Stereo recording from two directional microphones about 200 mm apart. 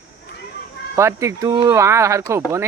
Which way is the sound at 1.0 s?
15° right (ahead or behind).